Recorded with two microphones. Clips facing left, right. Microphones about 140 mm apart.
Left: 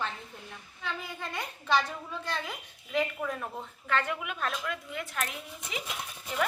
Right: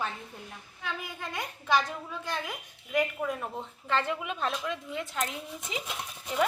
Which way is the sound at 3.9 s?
30° right (ahead or behind).